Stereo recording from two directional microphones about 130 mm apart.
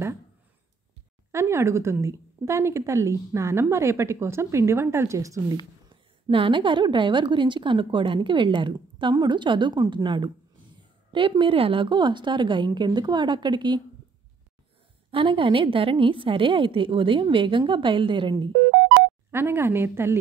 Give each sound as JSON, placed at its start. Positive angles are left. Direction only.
{"t": 1.3, "sound": "a woman's voice", "side_deg": -20}
{"t": 5.9, "sound": "a woman's voice", "side_deg": -40}
{"t": 15.0, "sound": "a woman's voice", "side_deg": -40}
{"t": 19.3, "sound": "a woman's voice", "side_deg": -20}